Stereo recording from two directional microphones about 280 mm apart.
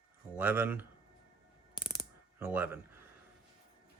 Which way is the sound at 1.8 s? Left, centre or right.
Centre.